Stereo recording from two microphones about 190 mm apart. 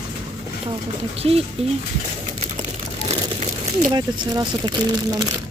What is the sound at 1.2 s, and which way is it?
Speech, 30° right (ahead or behind).